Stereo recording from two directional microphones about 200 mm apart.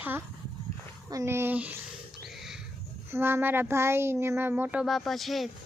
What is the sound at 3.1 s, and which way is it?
Speech, 10° right (ahead or behind).